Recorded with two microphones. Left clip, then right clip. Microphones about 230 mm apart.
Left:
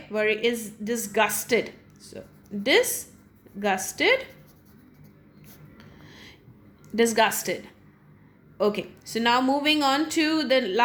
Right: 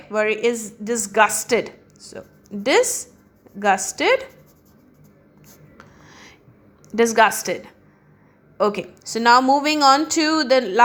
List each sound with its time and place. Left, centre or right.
0.1 s a woman's voice: centre
5.5 s writing: centre
6.9 s a woman's voice: centre